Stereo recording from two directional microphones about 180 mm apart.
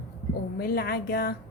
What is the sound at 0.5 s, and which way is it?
Speech, 60° left (ahead or behind).